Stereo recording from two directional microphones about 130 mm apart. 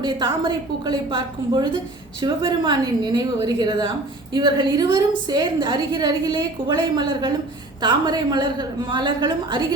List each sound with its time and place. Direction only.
0.0 s a woman's voice: 35° right (ahead or behind)